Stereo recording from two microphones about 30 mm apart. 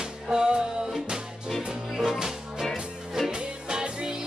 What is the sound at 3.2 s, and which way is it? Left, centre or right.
Music, right.